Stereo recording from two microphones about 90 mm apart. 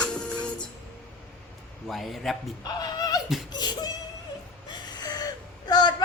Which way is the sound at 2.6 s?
50° left (ahead or behind).